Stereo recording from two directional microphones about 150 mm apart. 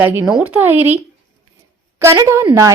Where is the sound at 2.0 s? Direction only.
20° right (ahead or behind).